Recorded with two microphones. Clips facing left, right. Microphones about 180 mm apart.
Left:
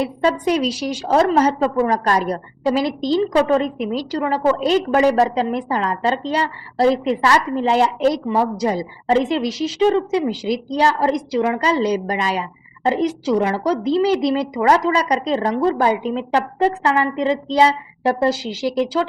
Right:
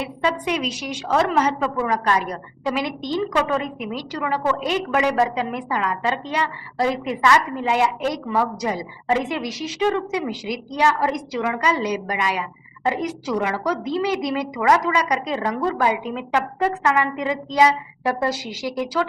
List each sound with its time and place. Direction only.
0.0 s a woman's voice: 40° left (ahead or behind)